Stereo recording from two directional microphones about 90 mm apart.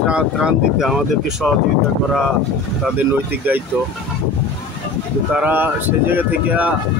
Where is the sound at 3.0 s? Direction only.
20° right (ahead or behind).